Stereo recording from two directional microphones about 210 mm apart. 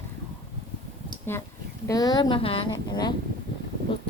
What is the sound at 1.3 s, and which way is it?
A woman's voice, 10° left (ahead or behind).